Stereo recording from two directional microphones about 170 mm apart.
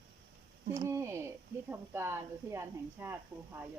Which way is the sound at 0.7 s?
20° right (ahead or behind).